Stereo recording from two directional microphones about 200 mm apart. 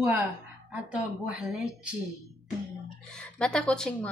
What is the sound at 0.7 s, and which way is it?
A woman's voice, 5° right (ahead or behind).